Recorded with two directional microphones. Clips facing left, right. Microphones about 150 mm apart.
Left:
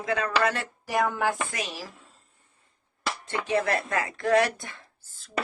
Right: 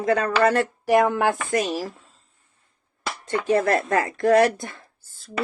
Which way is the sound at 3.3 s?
40° right (ahead or behind).